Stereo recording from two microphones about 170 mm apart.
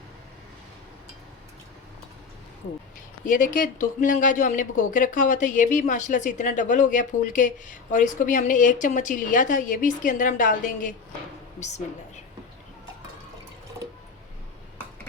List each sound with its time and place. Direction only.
3.2 s speech: 50° left (ahead or behind)